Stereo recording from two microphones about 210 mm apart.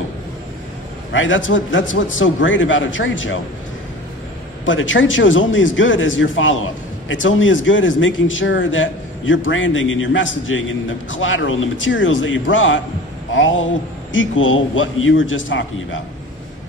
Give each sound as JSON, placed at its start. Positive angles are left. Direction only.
{"t": 1.1, "sound": "a man's voice", "side_deg": 65}
{"t": 4.6, "sound": "a man's voice", "side_deg": 65}